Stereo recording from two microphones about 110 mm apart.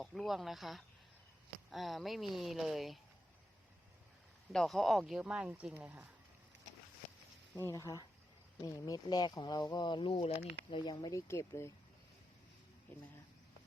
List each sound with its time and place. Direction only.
0.0 s speech: centre (ahead or behind)
4.5 s speech: 5° left (ahead or behind); by 6.1 s 15° right (ahead or behind)
7.5 s speech: 25° left (ahead or behind); by 10.3 s 55° left (ahead or behind)
10.7 s speech: 40° left (ahead or behind)
11.3 s speech: 25° left (ahead or behind)